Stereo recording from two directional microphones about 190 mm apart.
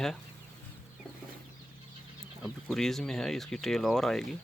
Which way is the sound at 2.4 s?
Centre (ahead or behind).